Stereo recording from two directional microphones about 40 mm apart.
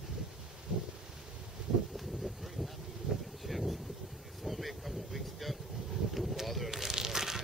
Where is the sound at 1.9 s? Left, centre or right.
Centre.